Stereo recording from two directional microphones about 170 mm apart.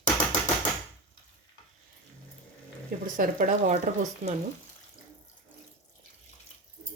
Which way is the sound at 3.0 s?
55° right (ahead or behind).